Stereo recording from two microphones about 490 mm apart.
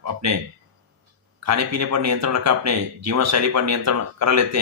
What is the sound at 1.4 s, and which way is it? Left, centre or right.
Speech, right.